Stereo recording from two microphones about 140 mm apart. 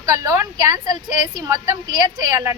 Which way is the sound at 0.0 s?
25° right (ahead or behind).